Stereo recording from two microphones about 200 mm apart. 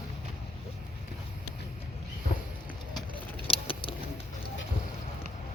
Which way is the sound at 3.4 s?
25° left (ahead or behind).